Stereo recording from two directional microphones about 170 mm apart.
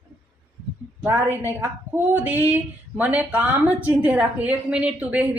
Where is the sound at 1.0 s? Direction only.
15° right (ahead or behind).